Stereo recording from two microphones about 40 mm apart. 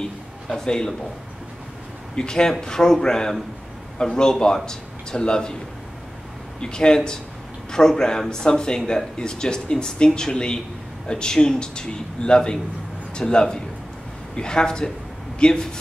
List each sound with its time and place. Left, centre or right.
0.0 s a man's voice: centre
2.1 s speech: centre
6.6 s a man's voice: left